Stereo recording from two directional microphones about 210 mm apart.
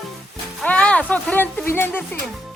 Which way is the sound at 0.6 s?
5° left (ahead or behind).